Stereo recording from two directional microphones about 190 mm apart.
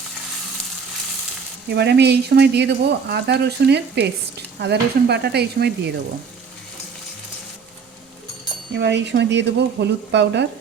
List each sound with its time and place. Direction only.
1.7 s speech: 60° right (ahead or behind)
8.7 s speech: 70° right (ahead or behind)